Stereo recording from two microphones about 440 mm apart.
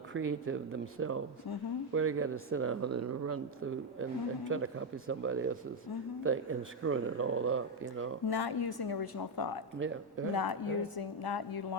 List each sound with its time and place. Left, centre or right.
0.1 s speech: right
8.3 s a woman's voice: left
9.7 s speech: right
10.3 s a woman's voice: left